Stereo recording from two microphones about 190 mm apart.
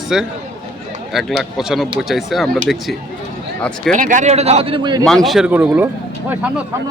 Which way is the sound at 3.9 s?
40° right (ahead or behind).